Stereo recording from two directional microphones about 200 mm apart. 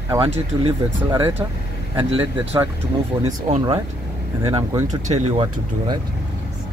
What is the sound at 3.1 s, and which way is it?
Speech, 20° right (ahead or behind).